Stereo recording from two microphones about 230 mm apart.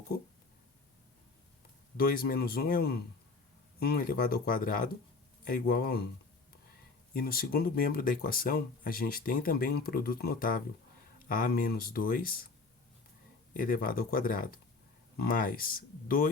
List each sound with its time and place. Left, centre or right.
2.0 s speech: left
7.1 s speech: left
13.5 s speech: left